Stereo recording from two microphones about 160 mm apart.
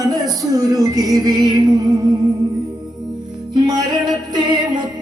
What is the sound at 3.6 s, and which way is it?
Music, 25° right (ahead or behind).